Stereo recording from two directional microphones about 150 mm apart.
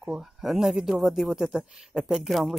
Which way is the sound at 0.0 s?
5° right (ahead or behind).